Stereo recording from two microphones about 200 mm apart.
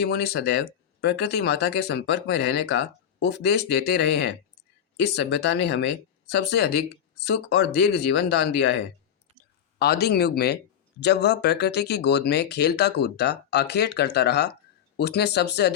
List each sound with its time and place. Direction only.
0.0 s speech: 55° left (ahead or behind)